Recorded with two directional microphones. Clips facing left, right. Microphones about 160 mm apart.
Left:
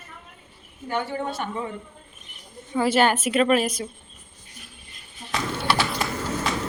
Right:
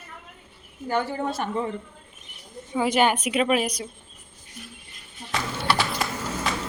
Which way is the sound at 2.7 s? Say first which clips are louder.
Left 1 dB; 10° right (ahead or behind).